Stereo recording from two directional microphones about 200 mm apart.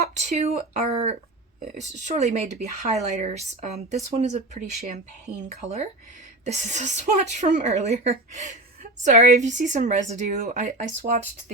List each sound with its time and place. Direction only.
0.2 s a woman's voice: 35° right (ahead or behind)